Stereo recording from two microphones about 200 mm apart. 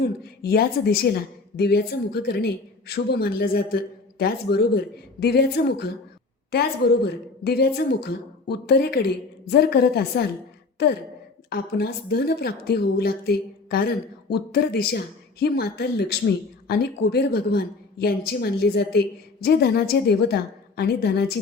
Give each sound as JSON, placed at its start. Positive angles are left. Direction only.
{"t": 0.0, "sound": "a woman's voice", "side_deg": 50}